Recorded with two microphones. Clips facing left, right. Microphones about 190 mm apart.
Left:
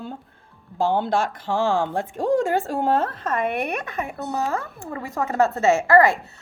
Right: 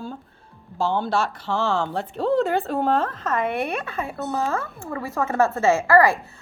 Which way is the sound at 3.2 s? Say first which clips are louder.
Even; 20° left (ahead or behind).